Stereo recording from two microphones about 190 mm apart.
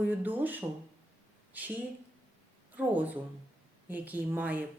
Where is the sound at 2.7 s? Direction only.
10° right (ahead or behind).